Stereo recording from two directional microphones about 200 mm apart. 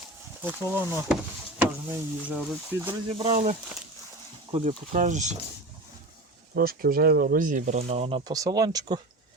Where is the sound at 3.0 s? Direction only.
25° right (ahead or behind).